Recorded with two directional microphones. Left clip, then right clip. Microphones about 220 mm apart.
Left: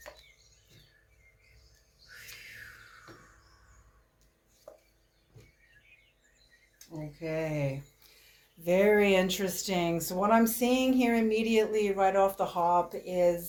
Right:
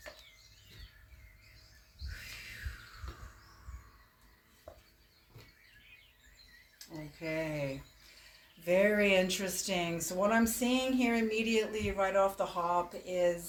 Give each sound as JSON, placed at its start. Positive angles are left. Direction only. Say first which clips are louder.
{"t": 4.7, "sound": "a sound", "louder": "left 2 dB", "side_deg": 30}
{"t": 7.3, "sound": "speech", "louder": "left 3 dB", "side_deg": 30}
{"t": 8.6, "sound": "speech", "louder": "left 4 dB", "side_deg": 35}